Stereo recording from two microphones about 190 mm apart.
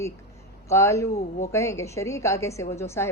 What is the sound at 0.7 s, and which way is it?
A woman's voice, 15° left (ahead or behind).